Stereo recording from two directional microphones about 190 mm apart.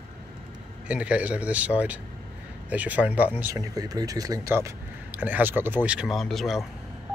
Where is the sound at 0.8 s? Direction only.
5° right (ahead or behind).